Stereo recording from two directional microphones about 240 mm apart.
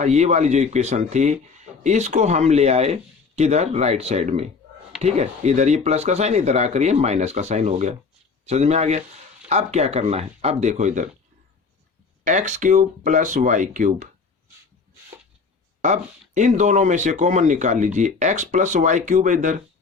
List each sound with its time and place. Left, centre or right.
0.0 s speech: right
12.2 s speech: right
15.8 s speech: right